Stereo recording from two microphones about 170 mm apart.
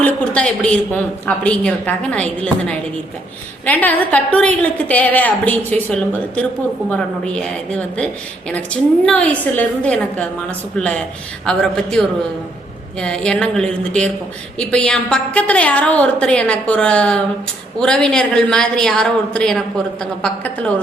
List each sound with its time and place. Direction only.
0.0 s a woman's voice: 5° left (ahead or behind)